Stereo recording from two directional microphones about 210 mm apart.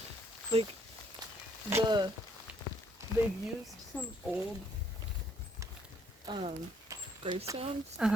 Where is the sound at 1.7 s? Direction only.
20° right (ahead or behind).